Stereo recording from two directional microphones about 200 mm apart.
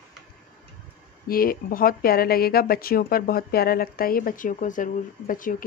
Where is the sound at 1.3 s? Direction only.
45° left (ahead or behind).